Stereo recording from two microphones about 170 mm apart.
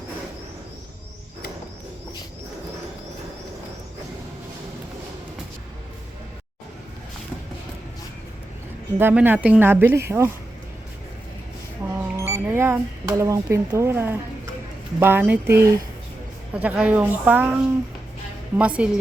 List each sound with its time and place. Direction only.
9.0 s speech: 10° right (ahead or behind)
11.9 s speech: 15° right (ahead or behind)